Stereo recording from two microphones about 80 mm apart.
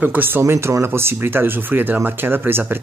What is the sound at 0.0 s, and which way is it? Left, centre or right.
Speech, right.